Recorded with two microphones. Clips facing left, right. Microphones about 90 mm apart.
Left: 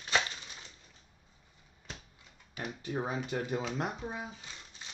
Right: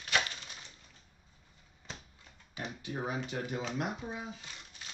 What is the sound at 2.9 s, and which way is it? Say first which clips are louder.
Speech: left 2 dB; 30° left (ahead or behind).